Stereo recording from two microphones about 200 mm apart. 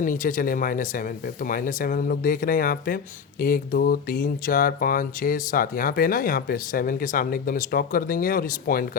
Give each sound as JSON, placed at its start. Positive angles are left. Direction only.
{"t": 0.0, "sound": "speech", "side_deg": 40}